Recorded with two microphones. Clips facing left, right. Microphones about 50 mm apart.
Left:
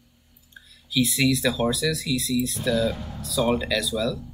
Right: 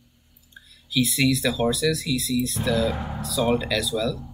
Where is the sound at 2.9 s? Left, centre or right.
Centre.